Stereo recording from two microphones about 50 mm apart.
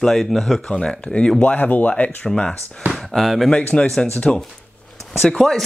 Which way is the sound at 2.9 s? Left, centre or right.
Centre.